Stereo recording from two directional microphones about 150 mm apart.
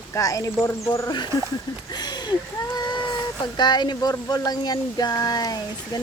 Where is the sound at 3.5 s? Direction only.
30° left (ahead or behind).